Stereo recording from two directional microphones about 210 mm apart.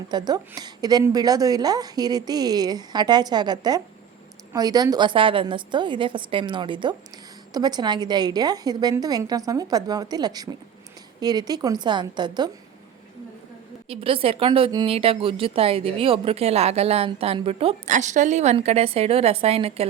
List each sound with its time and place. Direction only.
0.1 s speech: 20° right (ahead or behind)
13.8 s speech: 25° right (ahead or behind)